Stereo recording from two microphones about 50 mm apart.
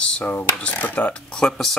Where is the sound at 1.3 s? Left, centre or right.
Centre.